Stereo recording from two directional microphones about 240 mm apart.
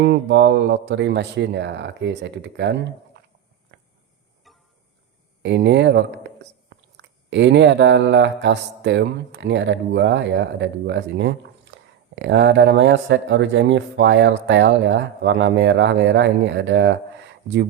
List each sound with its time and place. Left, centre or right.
0.1 s speech: right
3.7 s a sound: right
4.4 s music: centre
5.4 s speech: right